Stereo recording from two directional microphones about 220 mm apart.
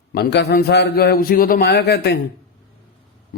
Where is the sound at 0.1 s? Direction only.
50° left (ahead or behind).